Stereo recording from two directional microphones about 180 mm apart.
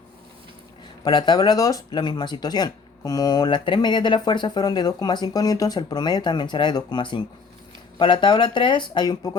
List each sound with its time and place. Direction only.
1.0 s speech: 25° left (ahead or behind)